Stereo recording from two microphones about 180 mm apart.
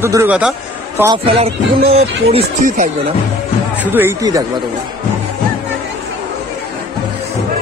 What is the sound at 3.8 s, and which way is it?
Speech, 10° right (ahead or behind).